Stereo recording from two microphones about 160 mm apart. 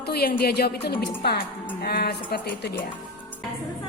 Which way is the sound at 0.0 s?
80° left.